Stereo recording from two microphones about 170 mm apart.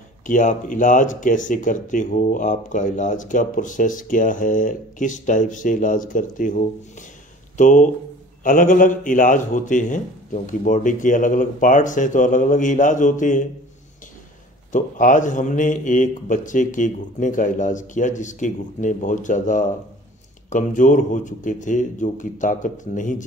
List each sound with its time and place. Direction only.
0.3 s speech: 50° left (ahead or behind)
14.7 s speech: 50° left (ahead or behind)